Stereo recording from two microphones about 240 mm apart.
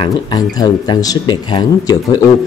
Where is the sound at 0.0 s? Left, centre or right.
Centre.